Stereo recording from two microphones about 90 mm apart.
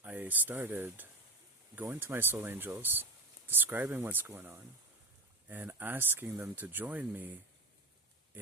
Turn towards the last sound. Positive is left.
turn(degrees=-20)  # may be behind; listen again after turning